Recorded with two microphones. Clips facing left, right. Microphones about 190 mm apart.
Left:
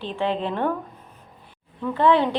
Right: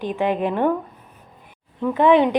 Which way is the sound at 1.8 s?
15° right (ahead or behind).